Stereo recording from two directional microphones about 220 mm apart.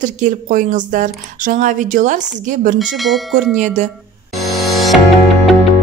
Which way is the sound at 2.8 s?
Centre (ahead or behind).